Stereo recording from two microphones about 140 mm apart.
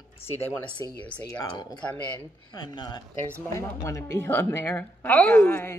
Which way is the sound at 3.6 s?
20° left (ahead or behind).